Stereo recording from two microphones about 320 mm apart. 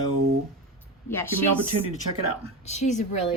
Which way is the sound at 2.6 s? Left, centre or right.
Left.